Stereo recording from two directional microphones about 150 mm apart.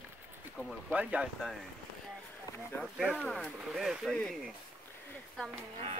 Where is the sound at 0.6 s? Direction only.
Centre (ahead or behind).